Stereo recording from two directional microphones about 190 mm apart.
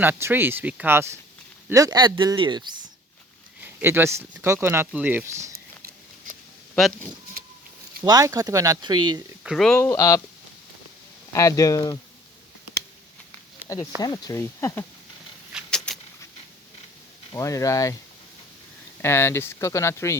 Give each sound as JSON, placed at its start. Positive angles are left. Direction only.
{"t": 0.0, "sound": "speech", "side_deg": -10}
{"t": 3.6, "sound": "speech", "side_deg": -10}
{"t": 6.7, "sound": "speech", "side_deg": 0}
{"t": 8.0, "sound": "speech", "side_deg": -20}
{"t": 9.4, "sound": "speech", "side_deg": 0}
{"t": 11.3, "sound": "speech", "side_deg": 20}
{"t": 14.0, "sound": "speech", "side_deg": 20}
{"t": 15.5, "sound": "a sound", "side_deg": 5}
{"t": 17.3, "sound": "speech", "side_deg": 15}
{"t": 19.0, "sound": "speech", "side_deg": 15}